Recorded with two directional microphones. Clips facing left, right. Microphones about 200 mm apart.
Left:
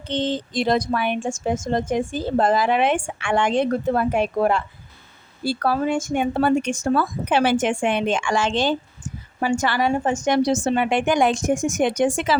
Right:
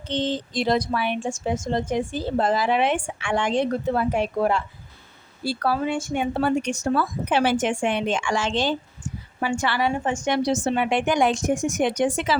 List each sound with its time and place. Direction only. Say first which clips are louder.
0.1 s a woman's voice: left 2 dB; 55° left (ahead or behind)
9.4 s a woman's voice: left 3 dB; 45° left (ahead or behind)